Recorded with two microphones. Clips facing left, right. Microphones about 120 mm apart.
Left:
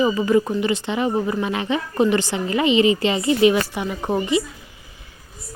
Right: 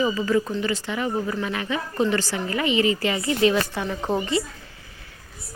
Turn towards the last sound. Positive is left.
turn(degrees=15)  # may be behind; listen again after turning